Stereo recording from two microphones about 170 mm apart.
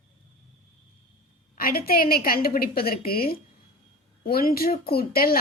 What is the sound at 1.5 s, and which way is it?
A woman's voice, 60° left (ahead or behind).